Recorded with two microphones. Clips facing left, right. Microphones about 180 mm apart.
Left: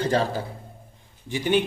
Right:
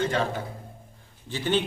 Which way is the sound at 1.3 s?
15° left (ahead or behind).